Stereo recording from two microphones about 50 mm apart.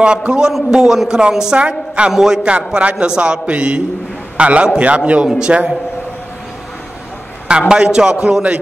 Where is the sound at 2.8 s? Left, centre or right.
Right.